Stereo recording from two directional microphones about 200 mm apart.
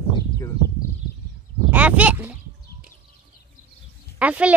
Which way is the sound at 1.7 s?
5° right (ahead or behind).